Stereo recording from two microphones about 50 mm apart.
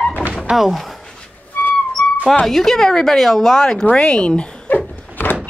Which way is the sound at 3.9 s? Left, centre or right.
Left.